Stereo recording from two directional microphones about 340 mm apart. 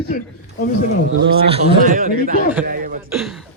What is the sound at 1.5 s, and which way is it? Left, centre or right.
Speech, centre.